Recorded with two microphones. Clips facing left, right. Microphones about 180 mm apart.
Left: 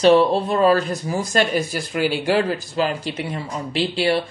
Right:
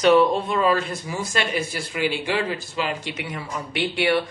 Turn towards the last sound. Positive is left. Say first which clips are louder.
# left 2 dB
turn(degrees=25)  # may be behind; listen again after turning